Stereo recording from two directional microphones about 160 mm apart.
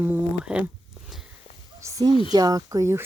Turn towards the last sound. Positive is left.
turn(degrees=-20)  # may be behind; listen again after turning